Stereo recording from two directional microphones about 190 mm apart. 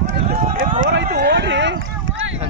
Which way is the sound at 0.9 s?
60° right (ahead or behind).